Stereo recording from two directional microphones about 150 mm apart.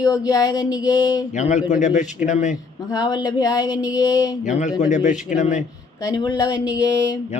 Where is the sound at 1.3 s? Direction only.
50° left (ahead or behind).